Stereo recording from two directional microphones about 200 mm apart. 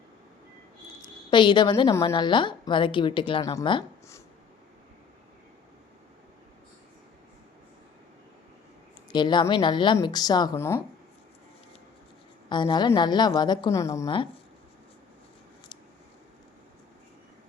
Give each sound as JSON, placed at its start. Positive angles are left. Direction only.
{"t": 1.0, "sound": "a woman's voice", "side_deg": 25}
{"t": 9.1, "sound": "a woman's voice", "side_deg": 20}
{"t": 12.5, "sound": "a woman's voice", "side_deg": 25}